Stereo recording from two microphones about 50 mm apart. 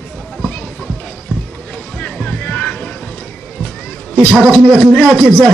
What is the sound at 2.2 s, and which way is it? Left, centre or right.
Music, left.